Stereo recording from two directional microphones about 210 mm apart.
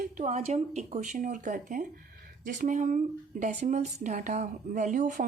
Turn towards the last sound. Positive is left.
turn(degrees=-40)  # may be behind; listen again after turning